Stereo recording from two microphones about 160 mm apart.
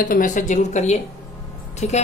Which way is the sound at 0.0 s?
55° left (ahead or behind).